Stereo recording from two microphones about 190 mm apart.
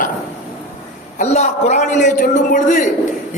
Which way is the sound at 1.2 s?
35° left (ahead or behind).